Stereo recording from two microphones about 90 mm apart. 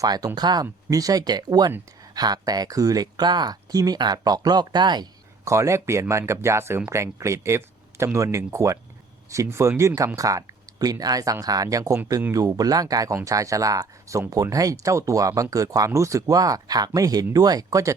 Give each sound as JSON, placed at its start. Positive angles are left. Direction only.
{"t": 0.0, "sound": "speech", "side_deg": -45}
{"t": 5.5, "sound": "speech", "side_deg": -35}